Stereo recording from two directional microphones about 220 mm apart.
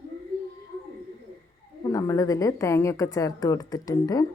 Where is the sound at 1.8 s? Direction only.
15° left (ahead or behind).